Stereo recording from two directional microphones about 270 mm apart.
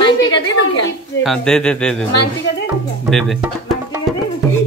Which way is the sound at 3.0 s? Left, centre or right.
Centre.